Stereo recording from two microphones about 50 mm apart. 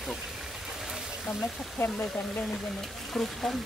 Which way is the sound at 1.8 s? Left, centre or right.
Left.